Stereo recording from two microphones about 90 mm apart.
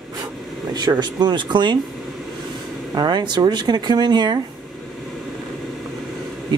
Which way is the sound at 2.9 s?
55° right (ahead or behind).